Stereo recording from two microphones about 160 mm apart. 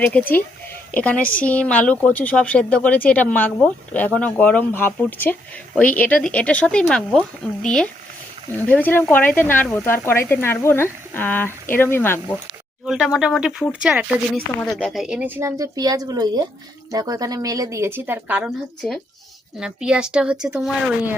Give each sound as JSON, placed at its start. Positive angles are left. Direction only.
{"t": 0.0, "sound": "speech", "side_deg": 10}
{"t": 12.8, "sound": "speech", "side_deg": 0}
{"t": 15.4, "sound": "speech", "side_deg": -20}